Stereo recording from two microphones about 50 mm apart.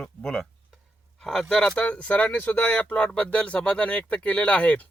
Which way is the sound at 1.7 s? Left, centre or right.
Left.